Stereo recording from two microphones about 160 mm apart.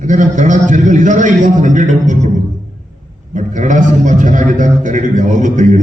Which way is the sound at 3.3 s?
50° right (ahead or behind).